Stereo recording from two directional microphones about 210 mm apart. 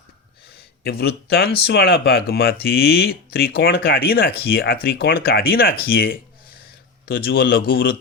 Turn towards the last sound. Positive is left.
turn(degrees=45)  # may be behind; listen again after turning